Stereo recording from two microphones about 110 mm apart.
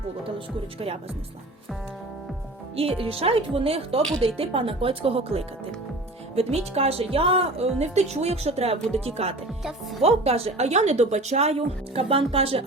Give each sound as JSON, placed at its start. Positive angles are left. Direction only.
{"t": 0.3, "sound": "speech", "side_deg": -60}
{"t": 3.0, "sound": "a woman's voice", "side_deg": -60}